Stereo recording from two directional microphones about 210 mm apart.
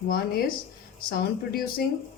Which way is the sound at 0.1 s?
45° left (ahead or behind).